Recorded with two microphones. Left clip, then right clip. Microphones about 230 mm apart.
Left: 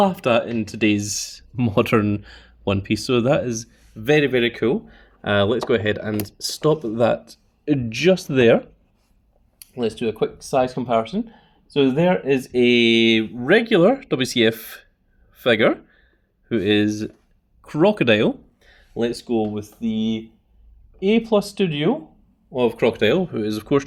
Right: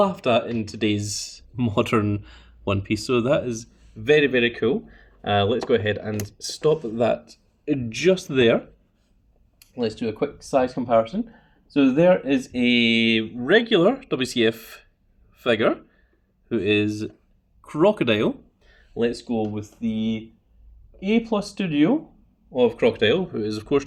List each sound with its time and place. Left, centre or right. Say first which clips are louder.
0.0 s speech: left 2 dB; left
9.6 s speech: left 2 dB; left
18.7 s speech: even; left